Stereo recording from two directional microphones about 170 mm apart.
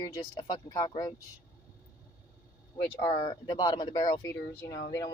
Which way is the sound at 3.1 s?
30° left (ahead or behind).